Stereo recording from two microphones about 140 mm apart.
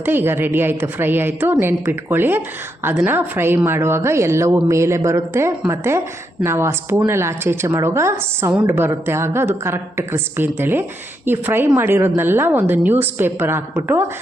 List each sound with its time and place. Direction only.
0.0 s a woman's voice: 15° right (ahead or behind)